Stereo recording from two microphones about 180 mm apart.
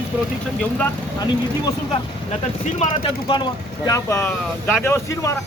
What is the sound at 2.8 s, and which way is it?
Speech, 30° left (ahead or behind).